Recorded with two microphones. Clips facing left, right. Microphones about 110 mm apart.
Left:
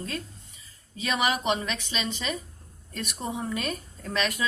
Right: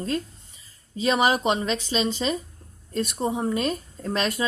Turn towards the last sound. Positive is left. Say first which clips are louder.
# right 3 dB
turn(degrees=-35)  # may be behind; listen again after turning